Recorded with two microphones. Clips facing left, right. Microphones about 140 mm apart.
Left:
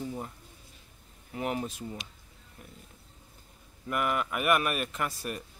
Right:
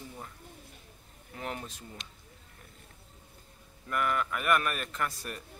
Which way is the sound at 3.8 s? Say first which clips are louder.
Left 1 dB; 15° left (ahead or behind).